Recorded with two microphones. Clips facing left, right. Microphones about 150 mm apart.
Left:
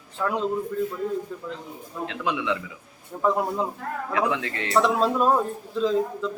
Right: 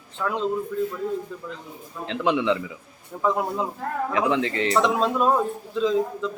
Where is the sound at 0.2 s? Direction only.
5° left (ahead or behind).